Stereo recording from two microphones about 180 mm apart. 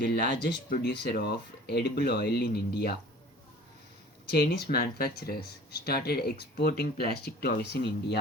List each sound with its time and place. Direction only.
0.0 s speech: 60° left (ahead or behind)
4.3 s speech: 60° left (ahead or behind)